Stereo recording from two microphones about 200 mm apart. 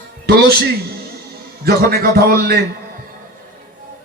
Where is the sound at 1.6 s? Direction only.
50° right (ahead or behind).